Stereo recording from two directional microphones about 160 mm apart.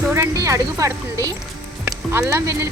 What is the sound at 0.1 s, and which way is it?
Speech, 20° right (ahead or behind).